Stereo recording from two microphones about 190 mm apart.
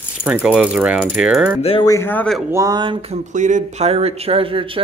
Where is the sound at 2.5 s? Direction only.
20° right (ahead or behind).